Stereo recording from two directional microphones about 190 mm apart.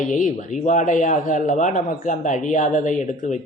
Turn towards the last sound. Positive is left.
turn(degrees=40)  # may be behind; listen again after turning